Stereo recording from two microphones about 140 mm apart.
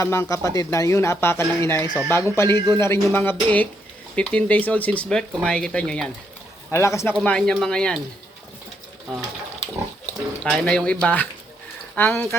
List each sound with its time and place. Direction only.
0.0 s speech: 20° left (ahead or behind)
6.7 s speech: 20° left (ahead or behind)
7.3 s speech: 5° left (ahead or behind)
10.1 s speech: 10° left (ahead or behind)